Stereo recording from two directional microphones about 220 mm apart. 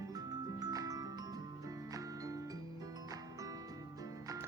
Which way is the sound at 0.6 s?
15° right (ahead or behind).